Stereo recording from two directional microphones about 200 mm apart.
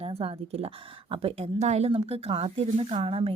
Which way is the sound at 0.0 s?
30° right (ahead or behind).